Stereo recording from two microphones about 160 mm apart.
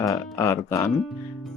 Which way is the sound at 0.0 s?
20° left (ahead or behind).